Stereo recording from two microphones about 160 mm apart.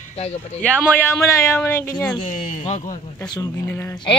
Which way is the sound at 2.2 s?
50° left (ahead or behind).